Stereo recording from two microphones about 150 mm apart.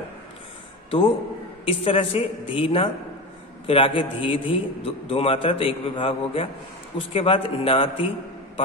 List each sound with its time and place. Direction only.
0.8 s a man's voice: 35° left (ahead or behind)